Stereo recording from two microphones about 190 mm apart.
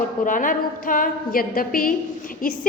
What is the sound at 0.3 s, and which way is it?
A woman's voice, 45° left (ahead or behind).